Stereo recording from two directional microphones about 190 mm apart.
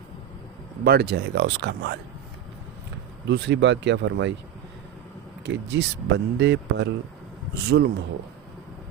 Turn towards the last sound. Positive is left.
turn(degrees=-60)  # may be behind; listen again after turning